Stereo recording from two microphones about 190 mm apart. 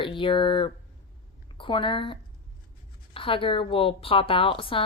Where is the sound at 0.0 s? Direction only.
25° left (ahead or behind).